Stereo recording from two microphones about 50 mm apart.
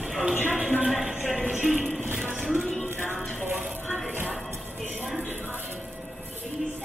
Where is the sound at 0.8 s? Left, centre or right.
Centre.